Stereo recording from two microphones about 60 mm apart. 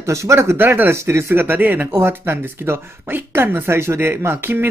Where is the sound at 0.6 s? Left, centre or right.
Right.